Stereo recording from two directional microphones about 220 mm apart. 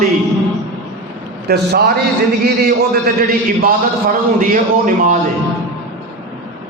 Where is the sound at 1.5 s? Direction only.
45° right (ahead or behind).